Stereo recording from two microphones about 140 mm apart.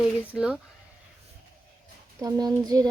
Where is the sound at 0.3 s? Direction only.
5° right (ahead or behind).